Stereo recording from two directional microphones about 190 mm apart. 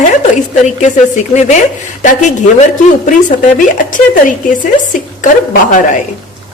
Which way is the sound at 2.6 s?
40° left (ahead or behind).